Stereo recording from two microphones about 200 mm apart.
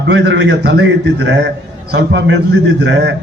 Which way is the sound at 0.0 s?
60° right (ahead or behind).